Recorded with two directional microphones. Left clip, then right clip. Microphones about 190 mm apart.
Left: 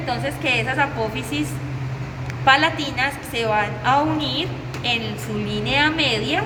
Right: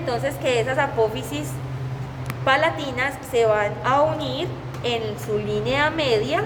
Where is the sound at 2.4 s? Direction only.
50° right (ahead or behind).